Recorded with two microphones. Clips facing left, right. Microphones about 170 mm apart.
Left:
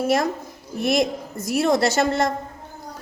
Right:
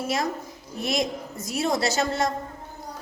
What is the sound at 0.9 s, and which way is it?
A woman's voice, 55° left (ahead or behind).